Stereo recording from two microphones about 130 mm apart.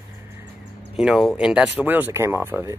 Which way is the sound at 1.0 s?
5° right (ahead or behind).